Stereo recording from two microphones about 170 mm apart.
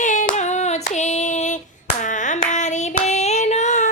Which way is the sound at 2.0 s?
45° left (ahead or behind).